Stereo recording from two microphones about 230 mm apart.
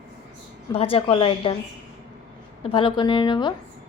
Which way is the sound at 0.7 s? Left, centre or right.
Left.